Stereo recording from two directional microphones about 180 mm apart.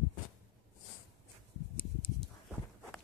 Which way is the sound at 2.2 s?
Centre (ahead or behind).